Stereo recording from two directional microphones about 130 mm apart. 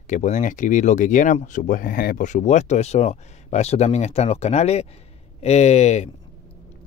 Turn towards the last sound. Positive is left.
turn(degrees=60)  # may be behind; listen again after turning